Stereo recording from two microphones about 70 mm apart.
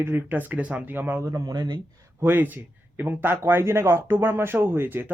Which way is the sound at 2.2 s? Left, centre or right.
Right.